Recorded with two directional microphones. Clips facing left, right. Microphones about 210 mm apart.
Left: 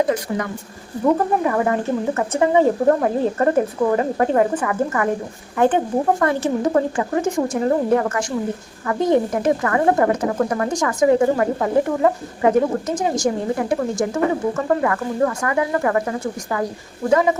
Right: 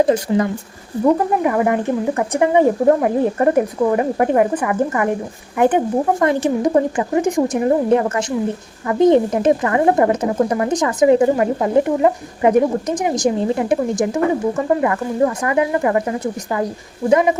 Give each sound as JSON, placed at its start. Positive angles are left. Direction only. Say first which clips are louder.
{"t": 0.0, "sound": "speech", "louder": "right 5 dB", "side_deg": -25}
{"t": 1.0, "sound": "speech", "louder": "right 2 dB", "side_deg": -15}